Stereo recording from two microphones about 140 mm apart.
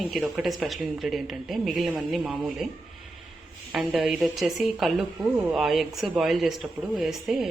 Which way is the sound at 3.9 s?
5° right (ahead or behind).